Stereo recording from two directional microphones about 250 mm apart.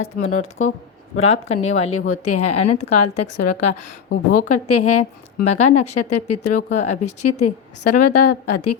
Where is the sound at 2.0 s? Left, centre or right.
Left.